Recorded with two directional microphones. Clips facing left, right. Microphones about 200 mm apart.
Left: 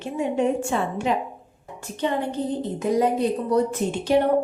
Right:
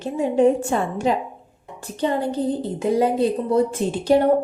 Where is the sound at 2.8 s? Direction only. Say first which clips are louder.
Right 2 dB; 30° right (ahead or behind).